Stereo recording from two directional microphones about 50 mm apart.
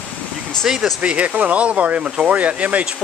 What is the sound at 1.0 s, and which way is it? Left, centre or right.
Speech, right.